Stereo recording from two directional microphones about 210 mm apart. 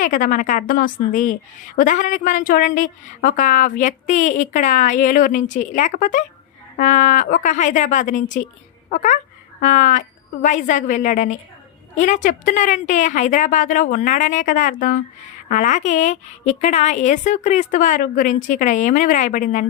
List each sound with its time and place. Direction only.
0.0 s a woman's voice: 40° left (ahead or behind)